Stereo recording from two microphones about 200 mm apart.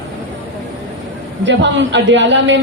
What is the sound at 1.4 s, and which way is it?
A woman's voice, 65° right (ahead or behind).